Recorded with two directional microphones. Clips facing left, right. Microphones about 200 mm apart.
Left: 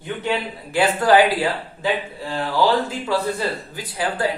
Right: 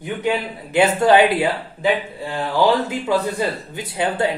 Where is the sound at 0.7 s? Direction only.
25° right (ahead or behind).